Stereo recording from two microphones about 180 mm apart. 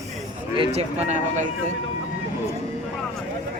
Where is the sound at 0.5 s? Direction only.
30° right (ahead or behind).